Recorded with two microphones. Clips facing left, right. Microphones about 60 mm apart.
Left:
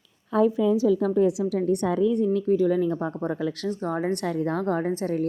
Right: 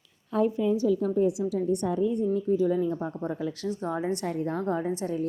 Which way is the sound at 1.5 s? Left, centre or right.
Left.